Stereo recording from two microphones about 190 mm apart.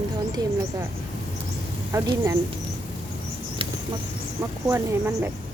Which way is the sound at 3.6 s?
30° right (ahead or behind).